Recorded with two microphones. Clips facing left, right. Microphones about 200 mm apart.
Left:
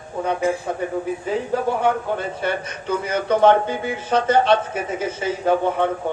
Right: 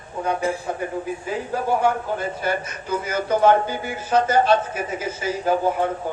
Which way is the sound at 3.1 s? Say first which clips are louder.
Left 2 dB; 30° left (ahead or behind).